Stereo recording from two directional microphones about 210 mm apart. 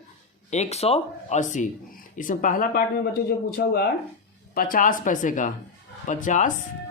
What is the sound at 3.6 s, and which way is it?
Speech, 50° left (ahead or behind).